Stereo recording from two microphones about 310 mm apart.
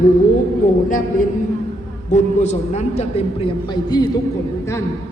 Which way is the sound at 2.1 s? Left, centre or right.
Left.